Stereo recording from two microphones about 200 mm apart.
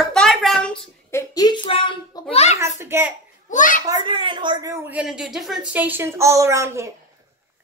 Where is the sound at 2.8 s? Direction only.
10° right (ahead or behind).